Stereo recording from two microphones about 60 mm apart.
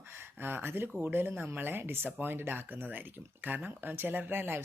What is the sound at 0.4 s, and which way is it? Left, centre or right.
Speech, right.